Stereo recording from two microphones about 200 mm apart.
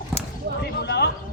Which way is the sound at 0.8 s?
55° left (ahead or behind).